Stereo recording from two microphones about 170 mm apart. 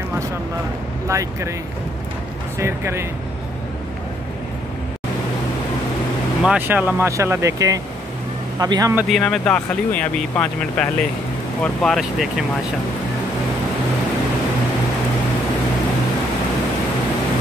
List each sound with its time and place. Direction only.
1.0 s speech: 15° right (ahead or behind)
2.6 s speech: 15° right (ahead or behind)
6.4 s speech: 5° right (ahead or behind)
9.1 s speech: 5° left (ahead or behind)